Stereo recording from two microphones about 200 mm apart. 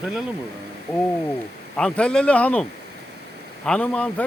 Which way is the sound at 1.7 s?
5° left (ahead or behind).